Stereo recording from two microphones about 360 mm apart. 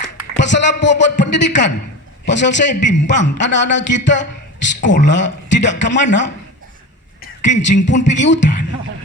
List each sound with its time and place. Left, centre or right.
0.3 s a man's voice: left